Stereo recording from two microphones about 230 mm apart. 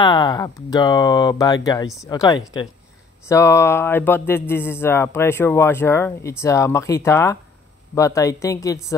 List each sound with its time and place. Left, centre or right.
0.0 s speech: centre